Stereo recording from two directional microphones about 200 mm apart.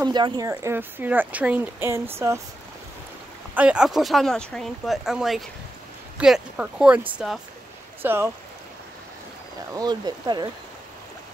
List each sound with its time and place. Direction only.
0.0 s speech: 20° right (ahead or behind)
3.5 s speech: 5° right (ahead or behind)
9.8 s speech: 20° right (ahead or behind)